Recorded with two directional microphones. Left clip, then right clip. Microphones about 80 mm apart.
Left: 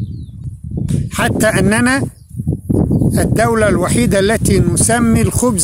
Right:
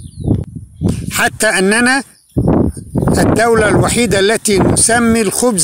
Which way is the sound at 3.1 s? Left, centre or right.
Left.